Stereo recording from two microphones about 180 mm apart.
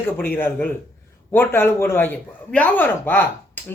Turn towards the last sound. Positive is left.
turn(degrees=10)  # may be behind; listen again after turning